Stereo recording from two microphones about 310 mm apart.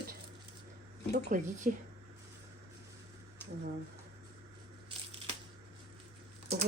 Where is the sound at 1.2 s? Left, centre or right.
Right.